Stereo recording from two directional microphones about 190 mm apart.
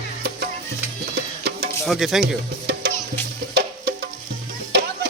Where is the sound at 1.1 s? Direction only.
60° right (ahead or behind).